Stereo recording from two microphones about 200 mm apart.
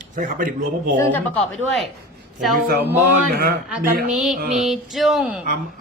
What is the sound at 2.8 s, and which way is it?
Speech, 10° right (ahead or behind).